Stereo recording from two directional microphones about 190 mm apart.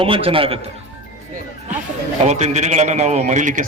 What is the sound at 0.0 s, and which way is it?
Speech, 30° right (ahead or behind).